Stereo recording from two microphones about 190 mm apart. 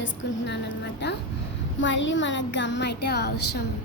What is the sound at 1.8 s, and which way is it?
Speech, 75° left (ahead or behind).